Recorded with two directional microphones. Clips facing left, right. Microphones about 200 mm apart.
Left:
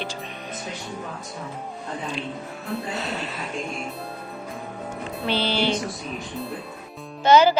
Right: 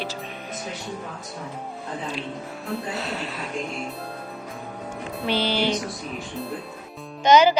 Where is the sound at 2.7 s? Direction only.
Centre (ahead or behind).